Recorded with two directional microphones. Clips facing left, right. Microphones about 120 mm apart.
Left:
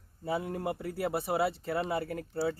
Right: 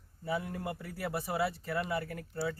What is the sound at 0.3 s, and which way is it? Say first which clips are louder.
Speech: left 3 dB; 30° left (ahead or behind).